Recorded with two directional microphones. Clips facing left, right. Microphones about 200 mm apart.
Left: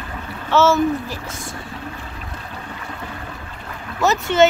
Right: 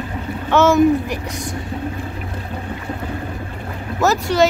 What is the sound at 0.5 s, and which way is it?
Speech, 15° right (ahead or behind).